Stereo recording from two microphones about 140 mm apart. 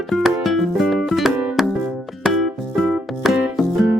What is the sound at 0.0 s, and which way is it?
Music, centre (ahead or behind).